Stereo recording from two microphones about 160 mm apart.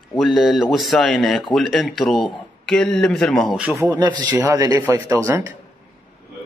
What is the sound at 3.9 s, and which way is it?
A man's voice, 25° right (ahead or behind).